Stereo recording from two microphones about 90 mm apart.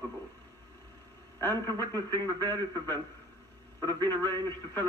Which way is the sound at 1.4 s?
25° left (ahead or behind).